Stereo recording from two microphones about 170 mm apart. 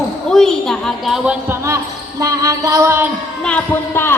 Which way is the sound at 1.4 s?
15° right (ahead or behind).